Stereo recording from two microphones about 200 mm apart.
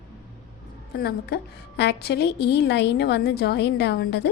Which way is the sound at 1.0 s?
50° left (ahead or behind).